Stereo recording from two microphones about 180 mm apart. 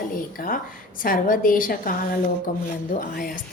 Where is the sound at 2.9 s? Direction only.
55° left (ahead or behind).